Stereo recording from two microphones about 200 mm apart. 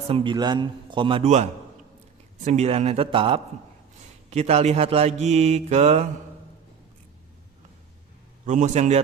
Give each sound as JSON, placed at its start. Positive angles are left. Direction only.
{"t": 0.1, "sound": "a man's voice", "side_deg": -25}
{"t": 4.3, "sound": "mantra", "side_deg": -35}
{"t": 8.4, "sound": "mantra", "side_deg": -35}